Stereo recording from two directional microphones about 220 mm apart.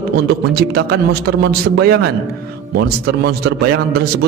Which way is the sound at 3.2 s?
45° right (ahead or behind).